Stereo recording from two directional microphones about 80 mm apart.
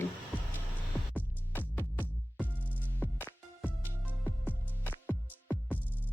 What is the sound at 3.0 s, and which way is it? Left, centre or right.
Music, left.